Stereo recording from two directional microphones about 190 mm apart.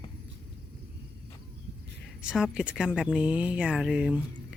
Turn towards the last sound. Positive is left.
turn(degrees=-5)  # may be behind; listen again after turning